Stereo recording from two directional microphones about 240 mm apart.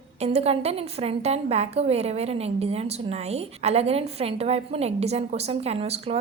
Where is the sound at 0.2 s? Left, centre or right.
Right.